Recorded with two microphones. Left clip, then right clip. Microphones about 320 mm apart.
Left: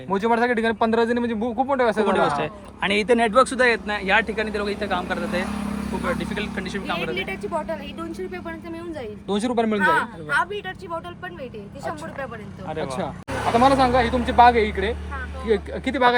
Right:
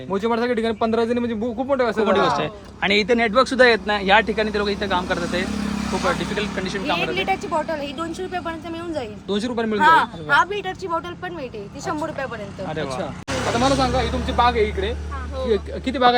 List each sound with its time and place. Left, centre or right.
0.1 s a man's voice: left
2.0 s speech: centre
9.3 s a man's voice: left
9.8 s speech: centre
12.6 s speech: centre
13.7 s a man's voice: left